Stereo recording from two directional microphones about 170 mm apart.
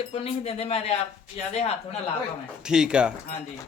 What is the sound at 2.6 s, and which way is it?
Speech, 5° right (ahead or behind).